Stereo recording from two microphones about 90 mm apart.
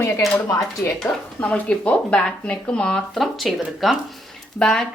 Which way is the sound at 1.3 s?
15° left (ahead or behind).